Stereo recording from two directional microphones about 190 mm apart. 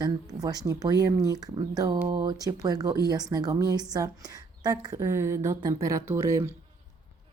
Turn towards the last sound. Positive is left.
turn(degrees=-15)  # may be behind; listen again after turning